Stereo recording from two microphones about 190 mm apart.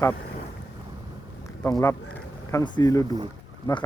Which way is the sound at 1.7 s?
20° left (ahead or behind).